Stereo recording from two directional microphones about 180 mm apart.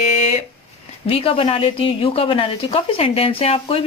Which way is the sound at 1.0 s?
30° left (ahead or behind).